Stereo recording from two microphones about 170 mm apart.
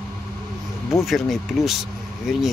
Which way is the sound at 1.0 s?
Centre (ahead or behind).